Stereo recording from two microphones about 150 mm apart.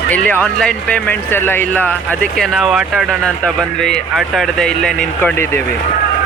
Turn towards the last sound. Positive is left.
turn(degrees=10)  # may be behind; listen again after turning